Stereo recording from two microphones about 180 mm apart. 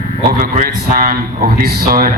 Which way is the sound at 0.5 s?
50° right (ahead or behind).